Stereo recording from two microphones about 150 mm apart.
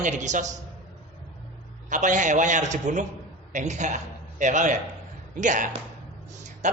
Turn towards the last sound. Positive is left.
turn(degrees=-55)  # may be behind; listen again after turning